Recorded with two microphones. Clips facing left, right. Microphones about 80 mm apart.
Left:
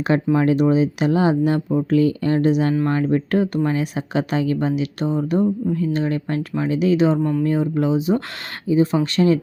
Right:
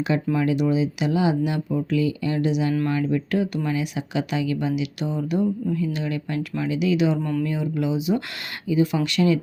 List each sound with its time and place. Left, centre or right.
0.3 s speech: left
7.2 s speech: centre
7.4 s speech: left